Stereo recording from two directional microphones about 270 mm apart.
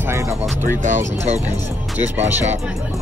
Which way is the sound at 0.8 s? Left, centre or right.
Right.